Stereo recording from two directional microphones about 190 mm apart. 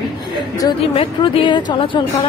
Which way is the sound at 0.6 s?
20° left (ahead or behind).